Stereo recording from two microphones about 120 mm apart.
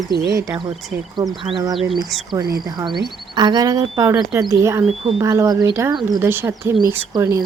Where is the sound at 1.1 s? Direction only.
45° right (ahead or behind).